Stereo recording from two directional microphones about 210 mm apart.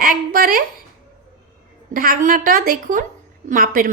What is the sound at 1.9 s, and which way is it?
Speech, 40° right (ahead or behind).